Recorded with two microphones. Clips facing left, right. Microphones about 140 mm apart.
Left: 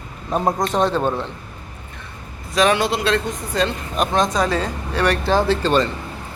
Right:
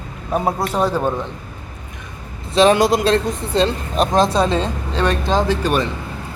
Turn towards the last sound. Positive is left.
turn(degrees=-10)  # may be behind; listen again after turning